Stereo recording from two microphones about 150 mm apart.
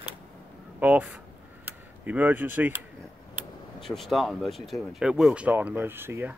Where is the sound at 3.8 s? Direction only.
Centre (ahead or behind); by 6.3 s 15° right (ahead or behind).